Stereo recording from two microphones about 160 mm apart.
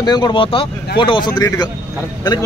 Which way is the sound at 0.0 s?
25° left (ahead or behind).